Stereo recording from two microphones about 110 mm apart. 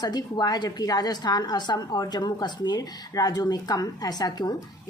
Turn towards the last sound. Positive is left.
turn(degrees=40)  # may be behind; listen again after turning